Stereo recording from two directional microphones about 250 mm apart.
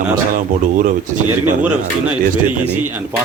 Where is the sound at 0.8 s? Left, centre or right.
Right.